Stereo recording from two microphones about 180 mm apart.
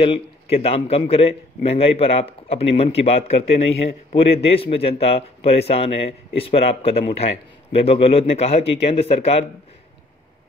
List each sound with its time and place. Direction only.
0.0 s a man's voice: 30° left (ahead or behind)